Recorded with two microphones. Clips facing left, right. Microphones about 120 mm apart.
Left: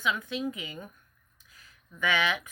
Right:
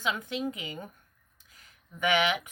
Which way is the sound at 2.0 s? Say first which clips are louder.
Right 2 dB; 20° right (ahead or behind).